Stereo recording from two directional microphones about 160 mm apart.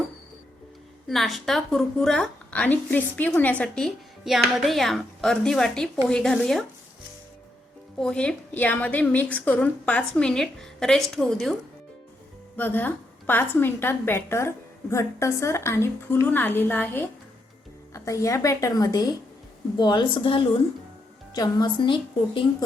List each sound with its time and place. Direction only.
1.0 s a woman's voice: centre (ahead or behind)
7.9 s a woman's voice: 5° left (ahead or behind)
12.5 s a woman's voice: 10° left (ahead or behind); by 21.9 s 30° left (ahead or behind)